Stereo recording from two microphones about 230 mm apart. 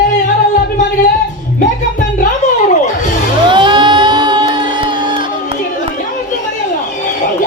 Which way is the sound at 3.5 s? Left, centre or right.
Right.